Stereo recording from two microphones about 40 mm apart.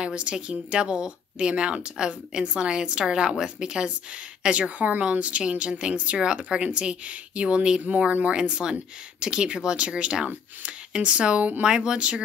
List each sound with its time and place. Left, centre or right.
0.0 s a woman's voice: right
7.8 s speech: right
8.3 s a woman's voice: right